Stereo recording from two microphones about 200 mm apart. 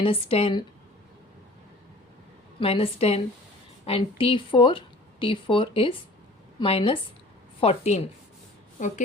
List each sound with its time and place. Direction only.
0.0 s a woman's voice: 30° left (ahead or behind)
2.6 s a woman's voice: 30° left (ahead or behind)